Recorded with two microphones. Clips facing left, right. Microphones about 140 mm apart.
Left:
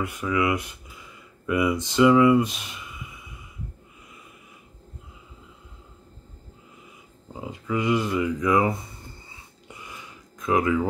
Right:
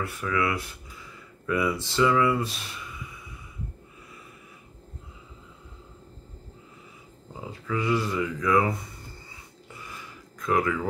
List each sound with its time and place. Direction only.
0.0 s speech: 15° left (ahead or behind)
7.3 s speech: 20° left (ahead or behind)
9.7 s a sound: 20° left (ahead or behind)
10.4 s speech: 20° left (ahead or behind)